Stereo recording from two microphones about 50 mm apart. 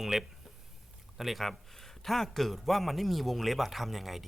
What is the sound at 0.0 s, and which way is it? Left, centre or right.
A man's voice, centre.